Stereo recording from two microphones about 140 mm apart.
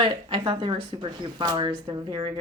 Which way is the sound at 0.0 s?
35° right (ahead or behind).